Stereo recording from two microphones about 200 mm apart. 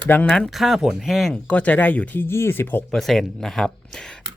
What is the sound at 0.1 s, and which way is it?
Speech, 5° left (ahead or behind).